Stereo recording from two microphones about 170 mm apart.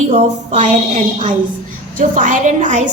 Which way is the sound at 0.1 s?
40° right (ahead or behind).